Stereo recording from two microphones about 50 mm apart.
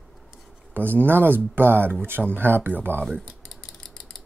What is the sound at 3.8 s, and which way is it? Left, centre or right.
Mechanisms, centre.